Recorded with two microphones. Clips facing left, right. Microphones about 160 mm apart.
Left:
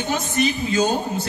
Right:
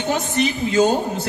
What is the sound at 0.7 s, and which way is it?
Speech, 20° right (ahead or behind).